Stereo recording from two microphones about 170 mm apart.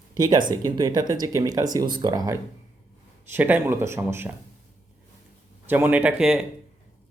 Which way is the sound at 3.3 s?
10° right (ahead or behind).